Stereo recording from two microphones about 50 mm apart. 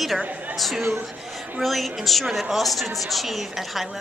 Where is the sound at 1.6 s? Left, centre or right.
Centre.